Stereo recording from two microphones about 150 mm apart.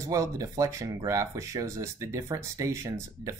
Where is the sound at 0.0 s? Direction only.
20° right (ahead or behind).